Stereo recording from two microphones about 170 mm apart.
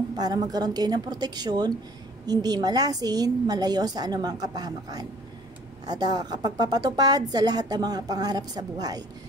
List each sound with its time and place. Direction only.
0.1 s a woman's voice: 25° right (ahead or behind)